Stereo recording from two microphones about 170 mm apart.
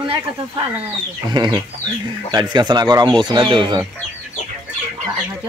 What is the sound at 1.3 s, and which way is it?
Speech, 25° right (ahead or behind).